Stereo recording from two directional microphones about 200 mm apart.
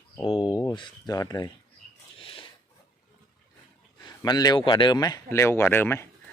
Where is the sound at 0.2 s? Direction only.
25° left (ahead or behind).